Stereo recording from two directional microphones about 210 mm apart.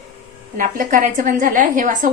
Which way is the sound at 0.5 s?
40° right (ahead or behind).